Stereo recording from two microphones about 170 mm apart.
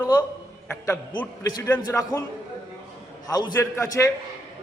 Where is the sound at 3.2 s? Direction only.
25° left (ahead or behind).